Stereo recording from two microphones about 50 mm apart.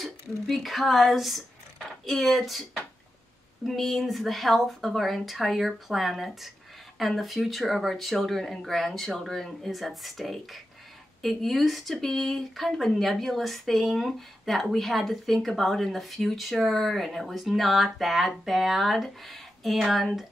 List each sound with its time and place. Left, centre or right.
0.0 s speech: centre
3.6 s speech: centre